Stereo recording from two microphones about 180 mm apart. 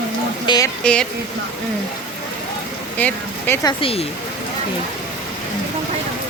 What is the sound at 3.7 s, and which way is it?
Speech, 30° left (ahead or behind).